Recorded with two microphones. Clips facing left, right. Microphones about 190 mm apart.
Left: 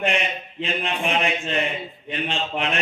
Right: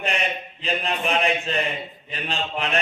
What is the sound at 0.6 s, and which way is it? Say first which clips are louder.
Mantra: even; 35° right (ahead or behind).